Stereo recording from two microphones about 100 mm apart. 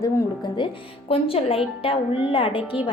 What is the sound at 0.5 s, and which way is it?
A woman's voice, 65° left (ahead or behind).